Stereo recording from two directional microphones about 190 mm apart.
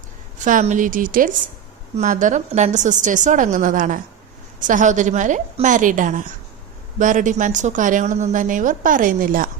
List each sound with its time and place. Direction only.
0.3 s a woman's voice: 40° right (ahead or behind)